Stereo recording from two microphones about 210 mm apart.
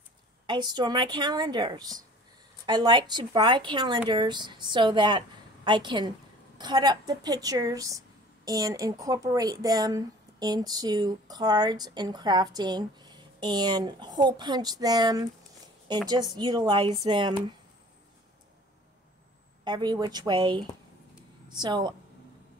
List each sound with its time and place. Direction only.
0.5 s a woman's voice: 20° right (ahead or behind)
19.6 s speech: 20° right (ahead or behind)